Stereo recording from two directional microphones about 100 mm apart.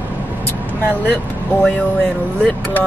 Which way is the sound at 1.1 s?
10° left (ahead or behind).